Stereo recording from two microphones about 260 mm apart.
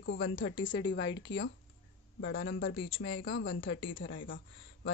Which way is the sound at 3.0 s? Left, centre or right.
Left.